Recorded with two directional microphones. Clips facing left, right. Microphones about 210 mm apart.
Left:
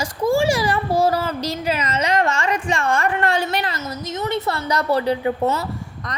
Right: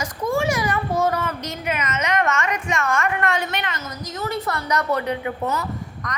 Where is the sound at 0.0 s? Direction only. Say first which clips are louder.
Left 4 dB; 30° left (ahead or behind).